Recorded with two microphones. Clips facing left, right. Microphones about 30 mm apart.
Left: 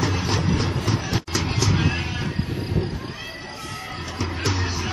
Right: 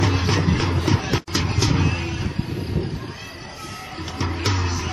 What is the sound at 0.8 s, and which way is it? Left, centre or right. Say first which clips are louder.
Music: right 3 dB; right.